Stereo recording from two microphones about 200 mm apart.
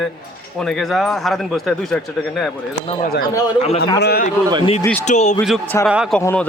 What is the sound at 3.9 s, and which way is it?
Speech, 55° left (ahead or behind).